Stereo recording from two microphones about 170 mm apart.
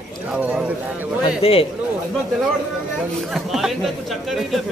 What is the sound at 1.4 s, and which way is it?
Speech, 35° left (ahead or behind).